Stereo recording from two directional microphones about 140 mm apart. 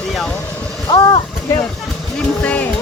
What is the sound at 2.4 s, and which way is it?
Vehicle, 10° left (ahead or behind).